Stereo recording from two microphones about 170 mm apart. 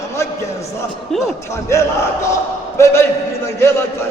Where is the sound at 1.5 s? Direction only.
15° left (ahead or behind).